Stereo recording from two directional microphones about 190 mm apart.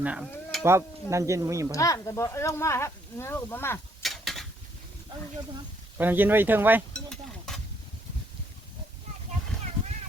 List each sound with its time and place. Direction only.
0.0 s stir: 5° right (ahead or behind)
1.1 s speech: 15° right (ahead or behind)
1.7 s speech: 15° left (ahead or behind)
4.0 s a sound: centre (ahead or behind)
6.0 s speech: 10° right (ahead or behind)
7.1 s stir: 5° left (ahead or behind)